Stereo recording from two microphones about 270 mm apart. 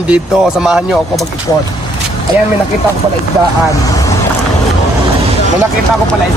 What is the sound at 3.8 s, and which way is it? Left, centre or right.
Speech, centre.